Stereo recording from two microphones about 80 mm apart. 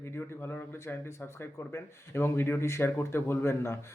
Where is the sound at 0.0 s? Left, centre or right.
Left.